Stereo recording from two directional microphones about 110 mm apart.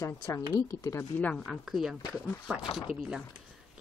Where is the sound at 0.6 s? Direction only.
30° left (ahead or behind).